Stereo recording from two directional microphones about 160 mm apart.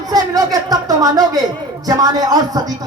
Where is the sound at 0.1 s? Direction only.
25° right (ahead or behind).